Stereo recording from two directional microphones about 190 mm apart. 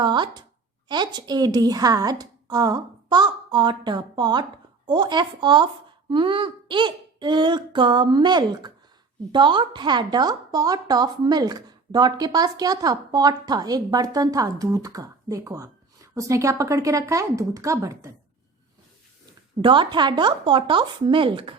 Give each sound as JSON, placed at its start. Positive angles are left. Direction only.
{"t": 0.0, "sound": "a woman's voice", "side_deg": -25}
{"t": 19.2, "sound": "a woman's voice", "side_deg": -25}